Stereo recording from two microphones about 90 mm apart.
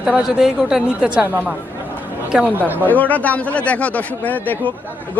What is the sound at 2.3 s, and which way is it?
Speech, 15° right (ahead or behind).